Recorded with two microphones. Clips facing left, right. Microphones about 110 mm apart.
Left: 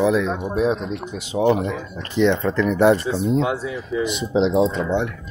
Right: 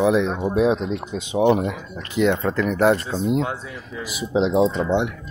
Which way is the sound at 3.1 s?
15° right (ahead or behind).